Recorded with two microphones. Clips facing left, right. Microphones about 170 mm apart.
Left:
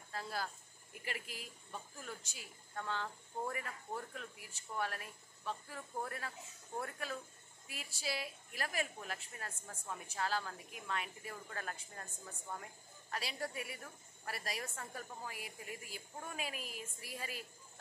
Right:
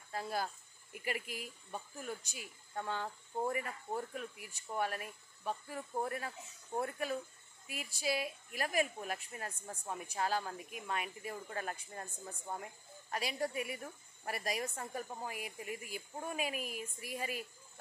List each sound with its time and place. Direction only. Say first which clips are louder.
0.1 s a woman's voice: right 4 dB; 15° right (ahead or behind)
12.3 s speech: right 3 dB; 30° right (ahead or behind)
13.1 s a woman's voice: right 5 dB; 15° right (ahead or behind)